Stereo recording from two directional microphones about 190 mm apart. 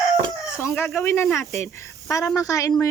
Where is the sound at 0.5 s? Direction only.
15° left (ahead or behind).